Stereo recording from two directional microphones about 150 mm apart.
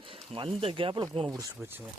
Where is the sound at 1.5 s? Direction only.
15° right (ahead or behind).